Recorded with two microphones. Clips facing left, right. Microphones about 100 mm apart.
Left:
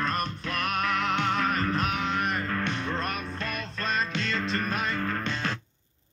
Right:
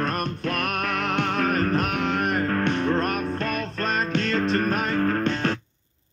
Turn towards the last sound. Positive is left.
turn(degrees=-50)  # may be behind; listen again after turning